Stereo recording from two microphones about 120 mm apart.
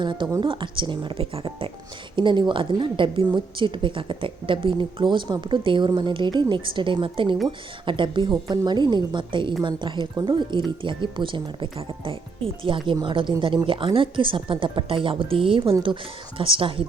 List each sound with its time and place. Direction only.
0.0 s a woman's voice: 40° right (ahead or behind)